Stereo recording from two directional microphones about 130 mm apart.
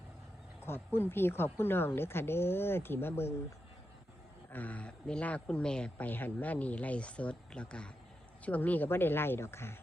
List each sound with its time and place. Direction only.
0.6 s speech: 15° left (ahead or behind)
4.5 s speech: 10° left (ahead or behind)